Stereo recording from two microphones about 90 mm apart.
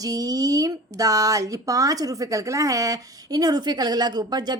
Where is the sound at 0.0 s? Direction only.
40° right (ahead or behind).